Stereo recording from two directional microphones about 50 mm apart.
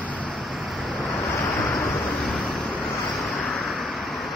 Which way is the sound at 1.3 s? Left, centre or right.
Left.